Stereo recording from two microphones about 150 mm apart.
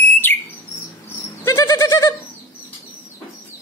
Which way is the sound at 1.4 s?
20° left (ahead or behind).